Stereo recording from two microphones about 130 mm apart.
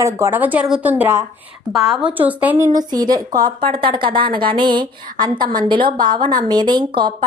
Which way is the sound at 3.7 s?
40° right (ahead or behind).